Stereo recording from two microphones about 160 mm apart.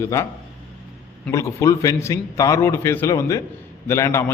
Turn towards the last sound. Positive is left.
turn(degrees=15)  # may be behind; listen again after turning